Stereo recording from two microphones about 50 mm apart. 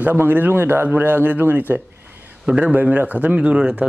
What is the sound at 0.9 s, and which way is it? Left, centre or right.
Speech, right.